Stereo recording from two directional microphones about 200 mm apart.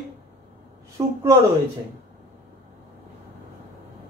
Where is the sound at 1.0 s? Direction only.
15° right (ahead or behind).